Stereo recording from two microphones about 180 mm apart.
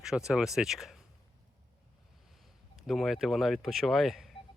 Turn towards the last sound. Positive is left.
turn(degrees=0)  # may be behind; listen again after turning